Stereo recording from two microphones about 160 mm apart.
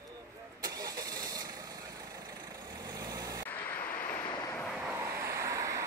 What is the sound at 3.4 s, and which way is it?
Vehicle, 10° left (ahead or behind).